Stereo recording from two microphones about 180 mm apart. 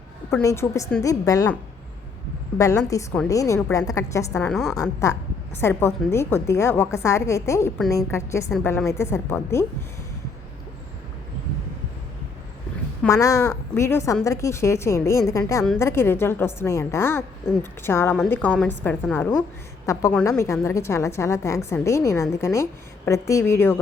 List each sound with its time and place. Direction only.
0.4 s a woman's voice: 15° left (ahead or behind)
2.6 s a woman's voice: 20° left (ahead or behind)
4.4 s a woman's voice: centre (ahead or behind)
4.7 s a woman's voice: 15° left (ahead or behind)
13.1 s a woman's voice: 20° left (ahead or behind)